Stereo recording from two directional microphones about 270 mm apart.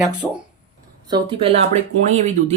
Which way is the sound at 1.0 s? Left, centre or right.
Centre.